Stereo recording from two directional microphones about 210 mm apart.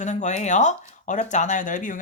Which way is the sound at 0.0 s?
35° left (ahead or behind).